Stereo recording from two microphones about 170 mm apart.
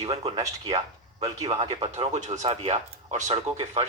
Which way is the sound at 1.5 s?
35° right (ahead or behind).